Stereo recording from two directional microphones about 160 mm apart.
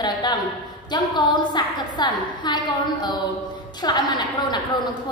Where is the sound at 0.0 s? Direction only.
25° left (ahead or behind).